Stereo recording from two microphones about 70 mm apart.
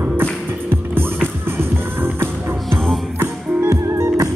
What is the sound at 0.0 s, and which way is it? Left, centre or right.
Music, right.